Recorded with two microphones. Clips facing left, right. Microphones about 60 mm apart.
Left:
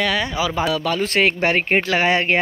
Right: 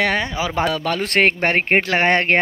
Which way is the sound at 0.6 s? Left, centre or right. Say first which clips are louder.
Right 1 dB; right.